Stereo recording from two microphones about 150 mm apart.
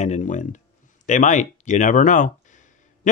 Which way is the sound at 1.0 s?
55° left (ahead or behind).